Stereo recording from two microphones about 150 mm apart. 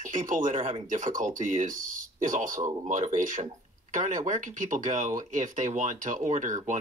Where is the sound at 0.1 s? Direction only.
60° right (ahead or behind).